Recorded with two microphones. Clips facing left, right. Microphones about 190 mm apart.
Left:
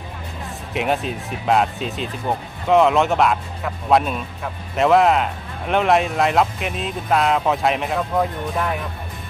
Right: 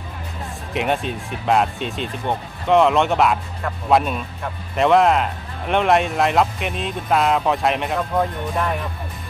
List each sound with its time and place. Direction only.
0.7 s speech: centre (ahead or behind)